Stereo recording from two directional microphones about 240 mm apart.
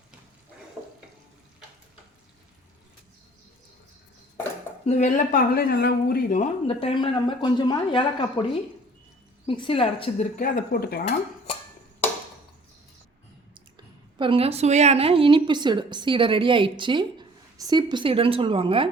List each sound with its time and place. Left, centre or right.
0.8 s water: centre
4.9 s speech: left
9.5 s speech: left
10.3 s speech: left
13.5 s speech: right